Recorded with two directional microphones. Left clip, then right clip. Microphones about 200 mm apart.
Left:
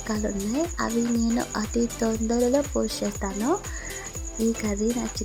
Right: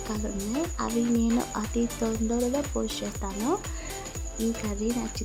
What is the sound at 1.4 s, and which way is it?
Speech, 15° left (ahead or behind).